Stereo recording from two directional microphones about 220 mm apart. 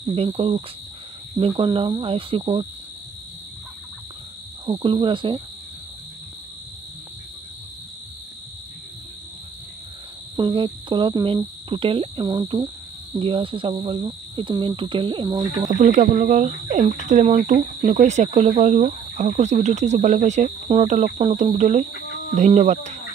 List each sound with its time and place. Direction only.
0.1 s speech: 25° right (ahead or behind)
4.6 s speech: 20° right (ahead or behind)
10.3 s speech: 20° right (ahead or behind)
15.7 s speech: 35° right (ahead or behind)
21.9 s a sound: 40° left (ahead or behind)
22.3 s speech: 30° right (ahead or behind)